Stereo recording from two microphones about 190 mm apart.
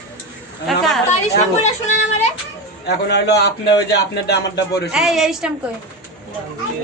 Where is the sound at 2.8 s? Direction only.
60° left (ahead or behind).